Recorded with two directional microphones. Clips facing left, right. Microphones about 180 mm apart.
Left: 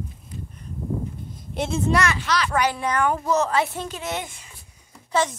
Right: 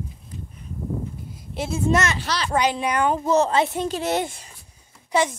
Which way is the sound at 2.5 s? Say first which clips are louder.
Right 4 dB; 20° right (ahead or behind).